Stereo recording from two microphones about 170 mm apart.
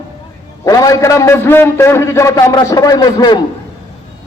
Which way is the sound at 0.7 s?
20° left (ahead or behind).